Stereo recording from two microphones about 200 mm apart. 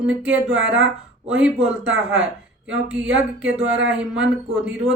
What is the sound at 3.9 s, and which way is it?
Speech, 5° right (ahead or behind).